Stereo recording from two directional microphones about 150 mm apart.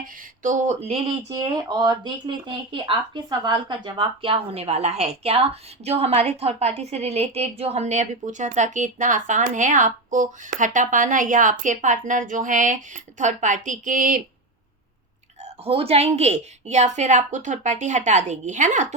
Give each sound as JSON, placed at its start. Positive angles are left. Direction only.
{"t": 0.0, "sound": "a woman's voice", "side_deg": -55}
{"t": 1.3, "sound": "speech", "side_deg": -25}
{"t": 15.6, "sound": "a woman's voice", "side_deg": -40}